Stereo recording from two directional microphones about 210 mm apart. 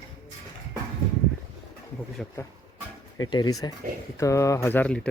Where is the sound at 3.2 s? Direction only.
20° left (ahead or behind).